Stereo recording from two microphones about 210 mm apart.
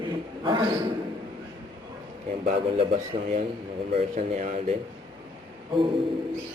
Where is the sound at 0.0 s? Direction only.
20° right (ahead or behind).